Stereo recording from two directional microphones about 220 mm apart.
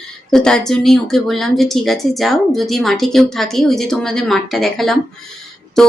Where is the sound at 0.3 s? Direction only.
5° left (ahead or behind).